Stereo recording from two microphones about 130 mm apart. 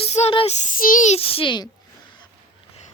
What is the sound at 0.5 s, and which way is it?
Child singing, 70° left (ahead or behind).